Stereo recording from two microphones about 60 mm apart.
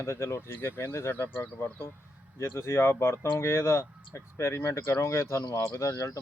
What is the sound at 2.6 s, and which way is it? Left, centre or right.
Speech, left.